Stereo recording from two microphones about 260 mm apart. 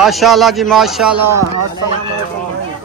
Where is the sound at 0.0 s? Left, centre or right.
Centre.